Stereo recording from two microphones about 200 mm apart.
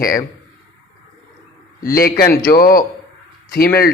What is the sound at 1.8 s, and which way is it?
Speech, 50° left (ahead or behind).